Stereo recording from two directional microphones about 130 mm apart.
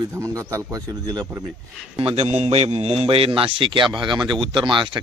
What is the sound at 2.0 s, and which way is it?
A man's voice, 50° right (ahead or behind).